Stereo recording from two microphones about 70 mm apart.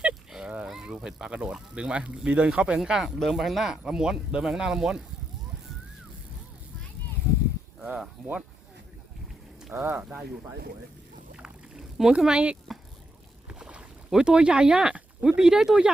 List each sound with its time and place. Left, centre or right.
0.0 s a sound: centre
0.6 s vehicle: centre
1.0 s speech: centre
7.9 s speech: centre
9.7 s speech: right
11.3 s rowboat: centre
15.4 s speech: centre